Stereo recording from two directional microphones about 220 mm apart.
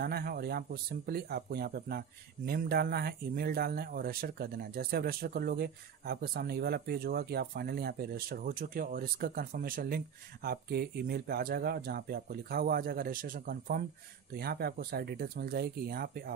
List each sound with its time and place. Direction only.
0.0 s speech: 45° right (ahead or behind)